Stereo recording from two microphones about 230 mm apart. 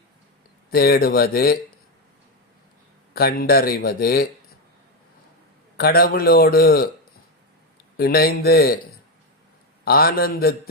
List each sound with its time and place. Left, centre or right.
0.7 s speech: left
3.2 s speech: left
5.7 s speech: left
7.9 s speech: left
9.8 s speech: left